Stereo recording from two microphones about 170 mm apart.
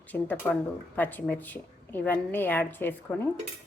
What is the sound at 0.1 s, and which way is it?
A woman's voice, 10° left (ahead or behind).